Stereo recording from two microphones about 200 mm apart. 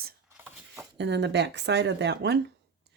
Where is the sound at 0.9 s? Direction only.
60° right (ahead or behind).